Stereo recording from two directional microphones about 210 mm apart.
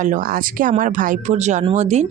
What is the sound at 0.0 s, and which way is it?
Speech, 40° right (ahead or behind).